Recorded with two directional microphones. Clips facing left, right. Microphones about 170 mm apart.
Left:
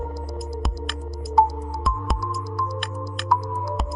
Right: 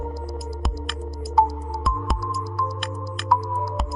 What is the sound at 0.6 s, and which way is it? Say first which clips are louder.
Music: even; centre (ahead or behind).